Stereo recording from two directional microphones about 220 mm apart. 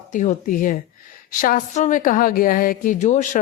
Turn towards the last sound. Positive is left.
turn(degrees=35)  # may be behind; listen again after turning